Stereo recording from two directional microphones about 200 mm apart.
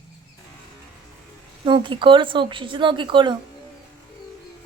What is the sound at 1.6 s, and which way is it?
Speech, 25° right (ahead or behind).